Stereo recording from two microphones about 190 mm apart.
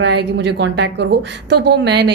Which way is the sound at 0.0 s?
65° right (ahead or behind).